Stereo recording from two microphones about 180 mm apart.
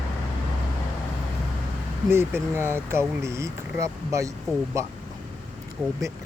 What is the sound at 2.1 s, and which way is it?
Speech, 15° right (ahead or behind).